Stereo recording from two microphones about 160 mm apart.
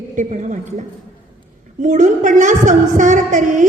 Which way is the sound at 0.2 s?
50° right (ahead or behind).